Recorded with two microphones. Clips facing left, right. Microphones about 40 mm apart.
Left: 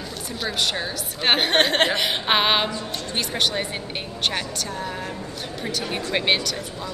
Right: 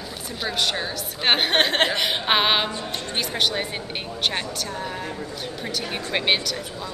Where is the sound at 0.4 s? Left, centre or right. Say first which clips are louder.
Even; centre.